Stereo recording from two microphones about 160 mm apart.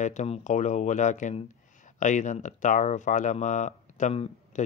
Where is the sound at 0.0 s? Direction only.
50° left (ahead or behind).